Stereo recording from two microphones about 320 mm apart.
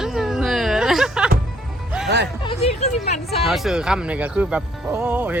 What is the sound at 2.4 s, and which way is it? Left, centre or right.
Speech, centre.